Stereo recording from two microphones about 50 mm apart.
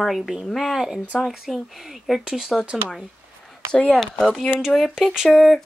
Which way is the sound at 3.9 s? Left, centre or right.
Centre.